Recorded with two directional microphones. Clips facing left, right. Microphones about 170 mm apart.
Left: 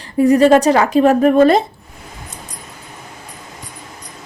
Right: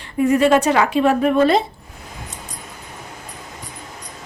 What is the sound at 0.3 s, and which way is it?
A woman's voice, 35° left (ahead or behind).